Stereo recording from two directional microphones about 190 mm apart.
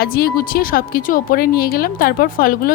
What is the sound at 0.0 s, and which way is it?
Speech, 55° left (ahead or behind).